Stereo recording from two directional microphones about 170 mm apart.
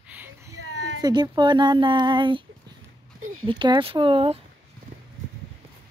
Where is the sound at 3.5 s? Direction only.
30° right (ahead or behind).